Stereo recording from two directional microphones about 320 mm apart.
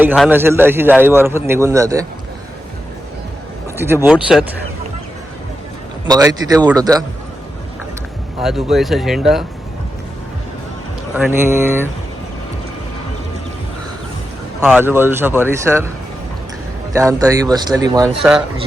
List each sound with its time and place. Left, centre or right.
0.0 s a man's voice: centre
3.8 s speech: centre
6.1 s a man's voice: centre
8.4 s speech: centre
11.1 s a man's voice: centre
14.6 s a man's voice: centre
16.9 s a man's voice: centre
18.2 s speech: centre